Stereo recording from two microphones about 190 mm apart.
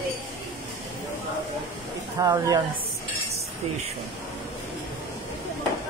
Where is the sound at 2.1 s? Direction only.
20° right (ahead or behind).